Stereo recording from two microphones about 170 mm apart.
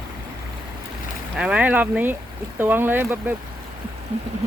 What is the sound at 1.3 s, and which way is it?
Speech, 5° right (ahead or behind).